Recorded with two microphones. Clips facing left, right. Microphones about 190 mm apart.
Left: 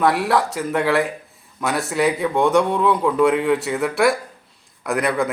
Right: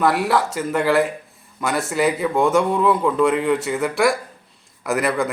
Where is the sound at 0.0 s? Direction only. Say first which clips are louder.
Even; centre (ahead or behind).